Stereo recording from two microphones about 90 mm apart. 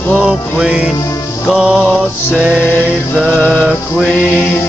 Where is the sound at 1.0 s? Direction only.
35° left (ahead or behind).